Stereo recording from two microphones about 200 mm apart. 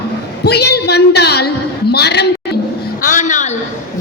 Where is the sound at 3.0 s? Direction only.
40° left (ahead or behind).